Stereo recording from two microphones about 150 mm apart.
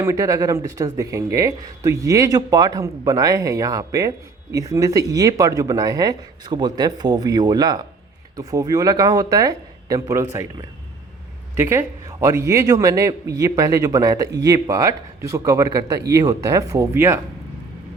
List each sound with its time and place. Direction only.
0.0 s a man's voice: 20° right (ahead or behind)
11.5 s a man's voice: 15° right (ahead or behind)